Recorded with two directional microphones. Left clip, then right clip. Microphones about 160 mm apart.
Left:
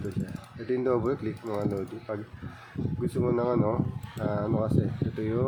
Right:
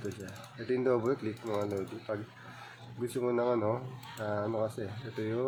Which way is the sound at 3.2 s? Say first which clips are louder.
Left 3 dB; 10° left (ahead or behind).